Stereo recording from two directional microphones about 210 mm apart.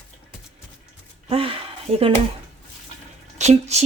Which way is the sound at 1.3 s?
25° right (ahead or behind).